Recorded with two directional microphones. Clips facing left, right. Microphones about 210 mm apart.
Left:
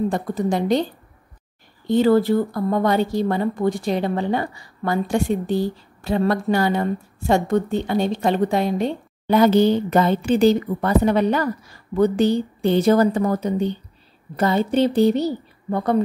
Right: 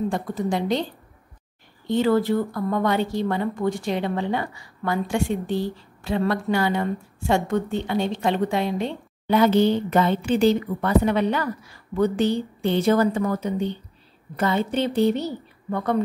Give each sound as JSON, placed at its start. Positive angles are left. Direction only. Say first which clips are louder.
{"t": 0.1, "sound": "a woman's voice", "louder": "left 3 dB", "side_deg": 40}
{"t": 1.9, "sound": "speech", "louder": "left 4 dB", "side_deg": 35}